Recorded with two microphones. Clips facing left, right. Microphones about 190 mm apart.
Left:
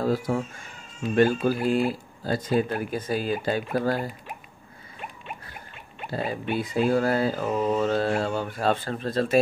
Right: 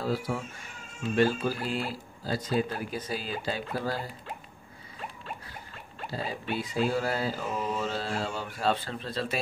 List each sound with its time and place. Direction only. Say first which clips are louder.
0.0 s speech: left 6 dB; 45° left (ahead or behind)
6.0 s speech: left 5 dB; 55° left (ahead or behind)